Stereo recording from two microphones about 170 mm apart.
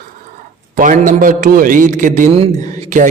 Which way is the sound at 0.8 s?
50° right (ahead or behind).